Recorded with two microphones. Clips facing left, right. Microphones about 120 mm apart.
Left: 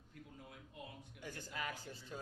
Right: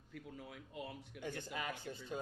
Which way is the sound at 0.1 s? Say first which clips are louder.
Right 5 dB; 90° right.